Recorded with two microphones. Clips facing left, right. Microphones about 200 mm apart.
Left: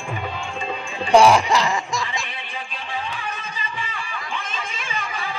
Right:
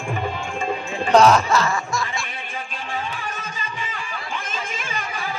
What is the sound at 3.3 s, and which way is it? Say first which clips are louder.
Music: even; 45° right (ahead or behind).